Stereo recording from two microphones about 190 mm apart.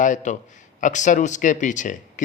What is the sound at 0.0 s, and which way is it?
A man's voice, 40° left (ahead or behind).